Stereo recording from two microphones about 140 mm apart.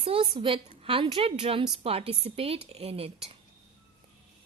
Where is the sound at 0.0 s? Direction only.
40° right (ahead or behind).